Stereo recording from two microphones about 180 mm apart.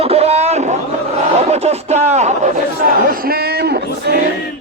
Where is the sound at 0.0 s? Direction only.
35° right (ahead or behind).